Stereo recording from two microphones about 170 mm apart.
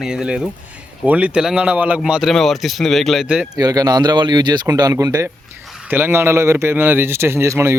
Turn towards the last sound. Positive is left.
turn(degrees=-15)  # may be behind; listen again after turning